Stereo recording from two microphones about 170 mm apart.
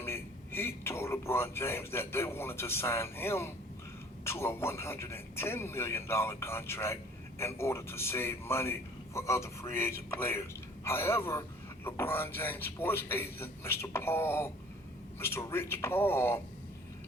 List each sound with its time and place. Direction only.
0.0 s a man's voice: 15° left (ahead or behind)